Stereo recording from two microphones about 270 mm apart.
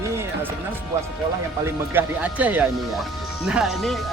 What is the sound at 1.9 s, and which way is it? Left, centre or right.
Speech, centre.